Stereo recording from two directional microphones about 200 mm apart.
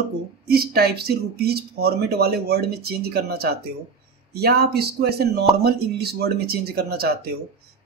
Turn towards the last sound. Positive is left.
turn(degrees=-50)  # may be behind; listen again after turning